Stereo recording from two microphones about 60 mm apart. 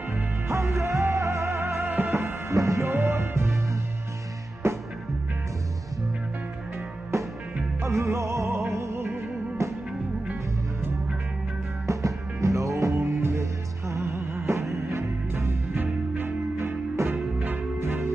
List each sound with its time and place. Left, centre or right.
0.1 s music: right
2.5 s music: right
2.8 s music: right
4.6 s music: right
7.8 s music: right
11.9 s music: right
15.7 s music: right
17.0 s music: right
17.4 s music: right